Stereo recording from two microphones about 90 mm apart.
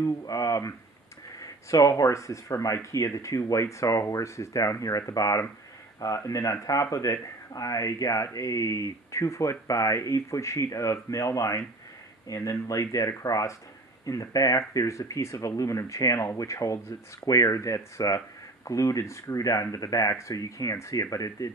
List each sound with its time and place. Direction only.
0.0 s speech: 40° left (ahead or behind)